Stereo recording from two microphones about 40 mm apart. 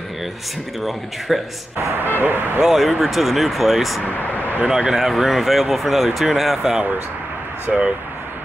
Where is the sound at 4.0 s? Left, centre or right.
Left.